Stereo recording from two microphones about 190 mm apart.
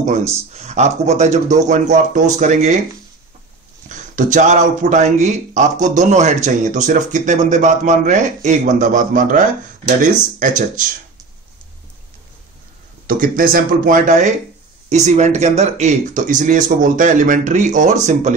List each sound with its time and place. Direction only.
0.5 s speech: 35° right (ahead or behind)
3.9 s speech: 40° right (ahead or behind)
10.4 s speech: 45° right (ahead or behind)
13.0 s speech: 50° right (ahead or behind)